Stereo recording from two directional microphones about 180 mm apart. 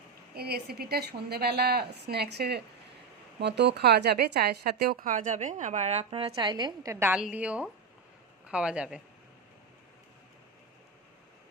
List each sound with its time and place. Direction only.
0.3 s a woman's voice: 60° right (ahead or behind); by 6.9 s 25° right (ahead or behind)
6.9 s a woman's voice: 15° right (ahead or behind)